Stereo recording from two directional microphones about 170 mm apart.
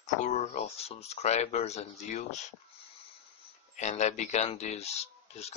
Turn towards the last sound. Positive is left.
turn(degrees=40)  # may be behind; listen again after turning